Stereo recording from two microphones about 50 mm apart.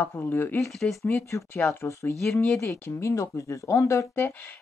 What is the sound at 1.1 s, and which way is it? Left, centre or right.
Speech, left.